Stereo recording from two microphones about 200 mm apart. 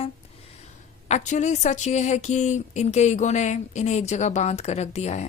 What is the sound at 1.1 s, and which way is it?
Speech, 35° left (ahead or behind).